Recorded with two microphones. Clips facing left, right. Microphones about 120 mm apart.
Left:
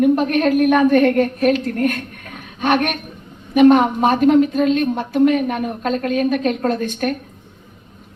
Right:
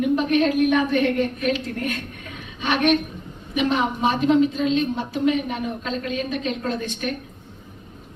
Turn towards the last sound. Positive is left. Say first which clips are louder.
# left 7 dB
turn(degrees=50)  # may be behind; listen again after turning